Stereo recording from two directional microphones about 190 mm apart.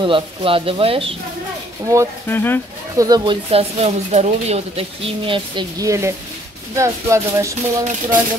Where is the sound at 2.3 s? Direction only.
10° left (ahead or behind).